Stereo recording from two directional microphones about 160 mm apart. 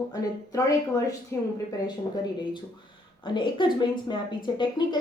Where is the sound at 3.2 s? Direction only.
30° left (ahead or behind).